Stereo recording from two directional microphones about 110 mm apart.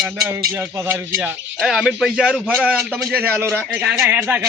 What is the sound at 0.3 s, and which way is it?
Speech, 15° right (ahead or behind).